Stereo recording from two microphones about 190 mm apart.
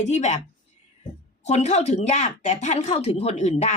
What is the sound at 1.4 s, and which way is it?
Speech, 40° left (ahead or behind).